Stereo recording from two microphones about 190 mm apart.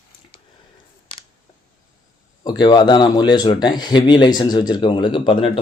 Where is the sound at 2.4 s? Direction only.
20° left (ahead or behind).